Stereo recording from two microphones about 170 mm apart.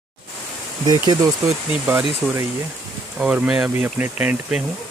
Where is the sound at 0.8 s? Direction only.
20° right (ahead or behind).